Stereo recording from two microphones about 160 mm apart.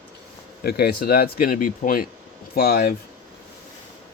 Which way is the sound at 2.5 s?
70° left (ahead or behind).